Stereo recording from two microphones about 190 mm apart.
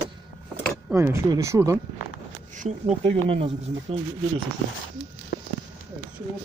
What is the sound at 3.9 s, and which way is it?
Speech, 30° right (ahead or behind).